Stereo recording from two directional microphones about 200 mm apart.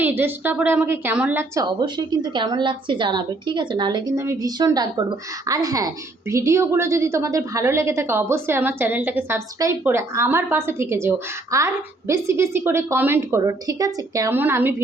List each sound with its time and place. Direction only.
0.0 s a woman's voice: 10° right (ahead or behind)